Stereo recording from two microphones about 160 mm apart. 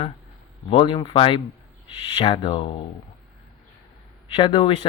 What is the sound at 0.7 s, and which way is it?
Speech, 30° left (ahead or behind).